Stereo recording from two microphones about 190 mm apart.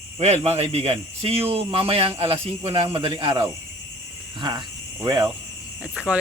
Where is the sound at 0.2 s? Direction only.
35° right (ahead or behind).